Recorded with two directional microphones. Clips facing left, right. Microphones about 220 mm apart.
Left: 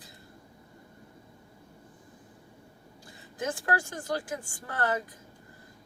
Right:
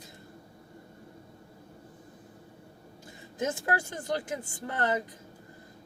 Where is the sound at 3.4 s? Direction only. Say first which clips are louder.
Right 1 dB; 20° right (ahead or behind).